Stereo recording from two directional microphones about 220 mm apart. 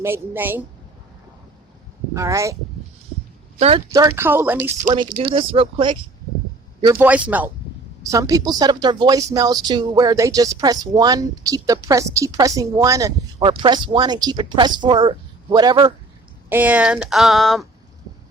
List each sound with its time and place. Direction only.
0.0 s speech: 10° right (ahead or behind)
2.1 s speech: 15° right (ahead or behind)
3.8 s speech: 15° right (ahead or behind)
5.3 s speech: 25° right (ahead or behind)
7.0 s speech: 5° right (ahead or behind)
16.5 s speech: 5° right (ahead or behind)